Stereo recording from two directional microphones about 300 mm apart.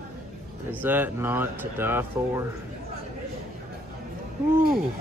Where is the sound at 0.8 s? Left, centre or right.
Centre.